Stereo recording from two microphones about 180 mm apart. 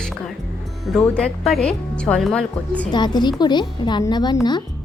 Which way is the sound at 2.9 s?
25° left (ahead or behind).